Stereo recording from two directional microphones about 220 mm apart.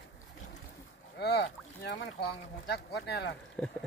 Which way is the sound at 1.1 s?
50° left (ahead or behind).